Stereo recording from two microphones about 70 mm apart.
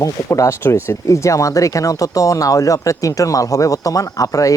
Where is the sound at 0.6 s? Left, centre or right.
Left.